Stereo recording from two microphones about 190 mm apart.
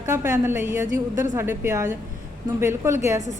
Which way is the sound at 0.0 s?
15° right (ahead or behind).